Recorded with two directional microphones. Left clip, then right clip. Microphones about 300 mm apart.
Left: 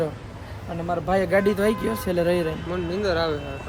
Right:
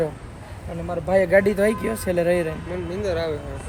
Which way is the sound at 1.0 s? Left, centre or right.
Centre.